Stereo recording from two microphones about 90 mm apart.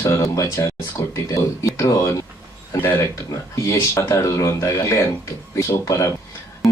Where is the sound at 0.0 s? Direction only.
35° left (ahead or behind).